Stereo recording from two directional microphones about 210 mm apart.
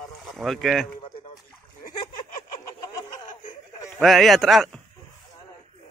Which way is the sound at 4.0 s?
Centre (ahead or behind).